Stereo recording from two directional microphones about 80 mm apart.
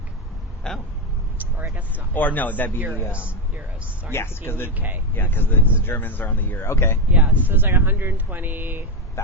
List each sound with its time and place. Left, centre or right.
0.7 s speech: centre
2.1 s speech: left
3.1 s speech: centre
4.1 s speech: left
6.7 s speech: left
7.1 s speech: centre
7.4 s speech: right
9.2 s speech: left